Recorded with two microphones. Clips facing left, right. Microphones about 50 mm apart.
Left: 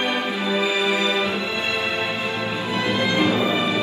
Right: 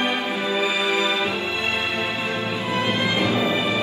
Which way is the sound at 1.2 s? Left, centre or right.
Left.